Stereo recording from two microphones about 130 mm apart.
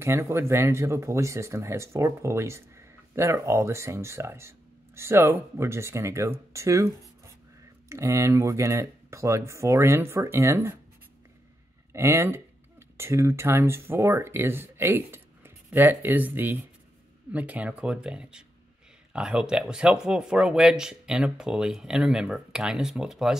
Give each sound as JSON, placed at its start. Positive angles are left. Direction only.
{"t": 0.0, "sound": "speech", "side_deg": -20}
{"t": 6.5, "sound": "a sound", "side_deg": -25}
{"t": 7.9, "sound": "speech", "side_deg": -20}
{"t": 11.9, "sound": "speech", "side_deg": -20}